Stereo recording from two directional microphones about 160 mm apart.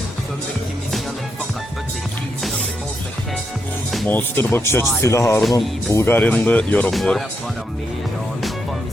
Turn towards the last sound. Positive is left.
turn(degrees=0)  # may be behind; listen again after turning